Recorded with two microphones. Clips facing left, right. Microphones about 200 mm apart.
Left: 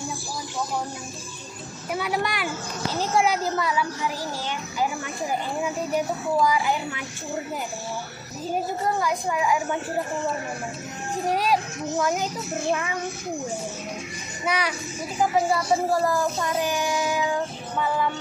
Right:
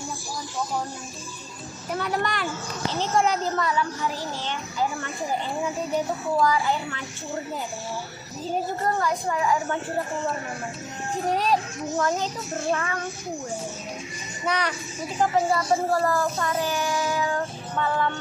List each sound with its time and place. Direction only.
1.9 s a child's voice: 10° left (ahead or behind)
6.4 s a child's voice: 10° left (ahead or behind)
8.8 s a child's voice: 10° left (ahead or behind)
11.3 s a child's voice: 10° left (ahead or behind)
14.4 s a child's voice: 10° left (ahead or behind)